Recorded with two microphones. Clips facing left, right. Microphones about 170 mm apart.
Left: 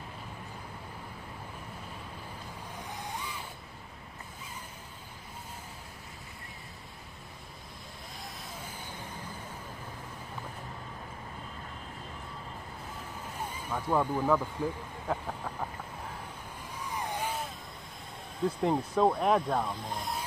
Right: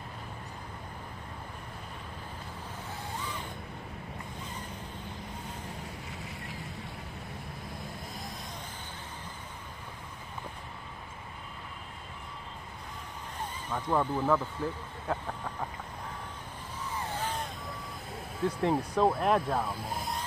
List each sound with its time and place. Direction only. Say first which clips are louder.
13.7 s speech: even; 10° left (ahead or behind)
16.9 s a sound: left 1 dB; 15° left (ahead or behind)
18.4 s speech: even; centre (ahead or behind)